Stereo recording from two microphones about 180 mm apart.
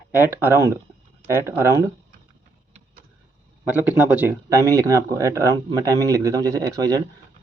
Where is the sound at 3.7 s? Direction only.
10° right (ahead or behind).